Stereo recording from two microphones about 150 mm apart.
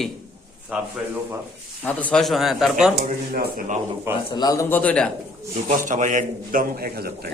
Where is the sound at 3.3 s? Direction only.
70° right (ahead or behind).